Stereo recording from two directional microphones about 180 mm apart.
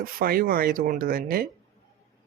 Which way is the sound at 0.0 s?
55° right (ahead or behind).